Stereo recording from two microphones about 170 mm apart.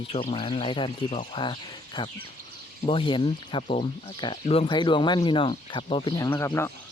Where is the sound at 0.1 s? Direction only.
35° left (ahead or behind).